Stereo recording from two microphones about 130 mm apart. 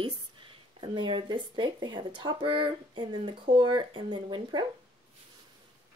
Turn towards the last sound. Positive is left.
turn(degrees=-35)  # may be behind; listen again after turning